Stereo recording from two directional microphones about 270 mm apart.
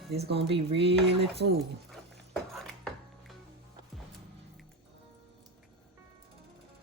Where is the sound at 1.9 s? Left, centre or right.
Centre.